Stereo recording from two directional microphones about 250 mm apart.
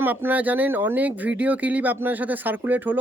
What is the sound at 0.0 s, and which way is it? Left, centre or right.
Speech, centre.